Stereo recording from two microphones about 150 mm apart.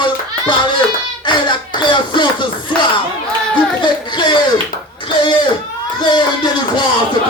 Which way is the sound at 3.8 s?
30° left (ahead or behind).